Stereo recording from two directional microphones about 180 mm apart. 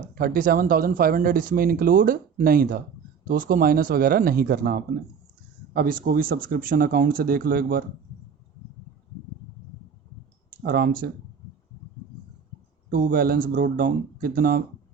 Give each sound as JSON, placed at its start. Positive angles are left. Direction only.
{"t": 0.1, "sound": "speech", "side_deg": -55}
{"t": 10.6, "sound": "speech", "side_deg": -60}
{"t": 12.9, "sound": "speech", "side_deg": -50}